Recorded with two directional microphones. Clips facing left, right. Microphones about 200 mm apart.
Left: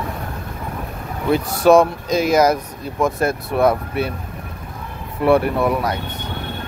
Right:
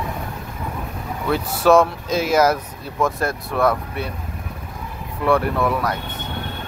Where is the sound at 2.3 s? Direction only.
15° left (ahead or behind).